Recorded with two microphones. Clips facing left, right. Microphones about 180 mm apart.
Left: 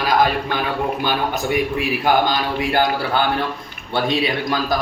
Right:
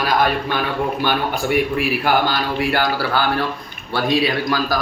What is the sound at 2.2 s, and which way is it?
Mantra, 20° left (ahead or behind).